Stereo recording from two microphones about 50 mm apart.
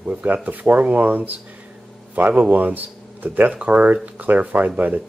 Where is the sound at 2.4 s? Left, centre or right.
Right.